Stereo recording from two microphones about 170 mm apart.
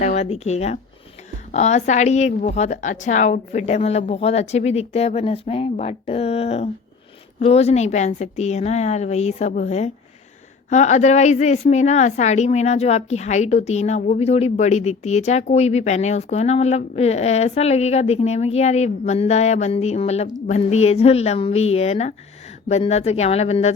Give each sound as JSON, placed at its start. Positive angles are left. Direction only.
{"t": 0.0, "sound": "a woman's voice", "side_deg": 40}